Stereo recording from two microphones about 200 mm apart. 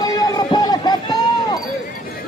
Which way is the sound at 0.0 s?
20° left (ahead or behind).